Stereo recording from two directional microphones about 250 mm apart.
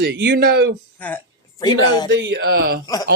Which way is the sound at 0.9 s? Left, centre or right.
Centre.